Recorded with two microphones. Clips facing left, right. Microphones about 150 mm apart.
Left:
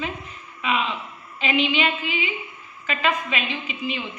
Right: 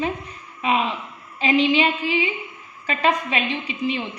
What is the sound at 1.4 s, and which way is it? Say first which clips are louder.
A woman's voice: right 4 dB; 35° right (ahead or behind).